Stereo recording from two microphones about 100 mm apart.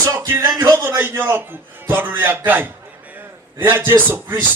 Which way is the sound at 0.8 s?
20° right (ahead or behind).